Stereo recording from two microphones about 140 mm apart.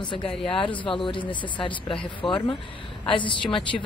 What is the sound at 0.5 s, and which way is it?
A woman's voice, 35° left (ahead or behind).